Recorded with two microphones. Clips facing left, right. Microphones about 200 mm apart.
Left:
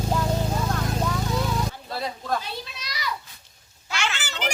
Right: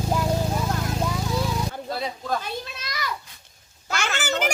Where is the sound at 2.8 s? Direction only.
50° right (ahead or behind).